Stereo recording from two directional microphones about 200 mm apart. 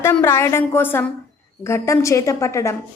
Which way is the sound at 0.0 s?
10° left (ahead or behind).